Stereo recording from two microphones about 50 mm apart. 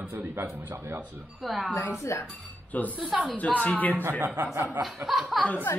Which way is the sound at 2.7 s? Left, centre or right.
Left.